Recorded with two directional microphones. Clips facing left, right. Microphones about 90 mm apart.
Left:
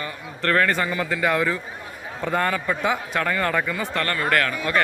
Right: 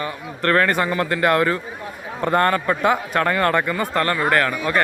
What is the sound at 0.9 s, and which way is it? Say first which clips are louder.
Speech: right 4 dB; 60° right (ahead or behind).